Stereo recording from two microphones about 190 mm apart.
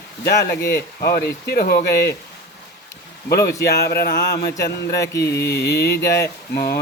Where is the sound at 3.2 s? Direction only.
55° left (ahead or behind).